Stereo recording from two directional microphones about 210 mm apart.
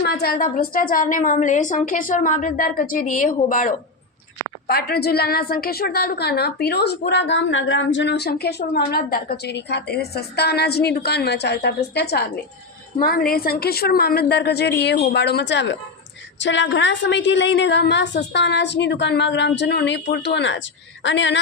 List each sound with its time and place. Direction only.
0.0 s a woman's voice: 50° left (ahead or behind)